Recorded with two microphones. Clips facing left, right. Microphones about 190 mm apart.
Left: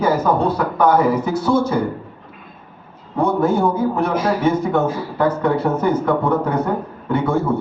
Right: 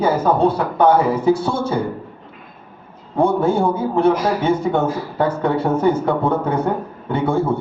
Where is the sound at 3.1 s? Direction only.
25° right (ahead or behind).